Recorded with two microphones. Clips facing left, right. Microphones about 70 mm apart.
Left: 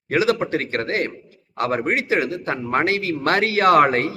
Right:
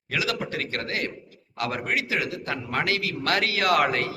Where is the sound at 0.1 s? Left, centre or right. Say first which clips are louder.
Left 9 dB; left.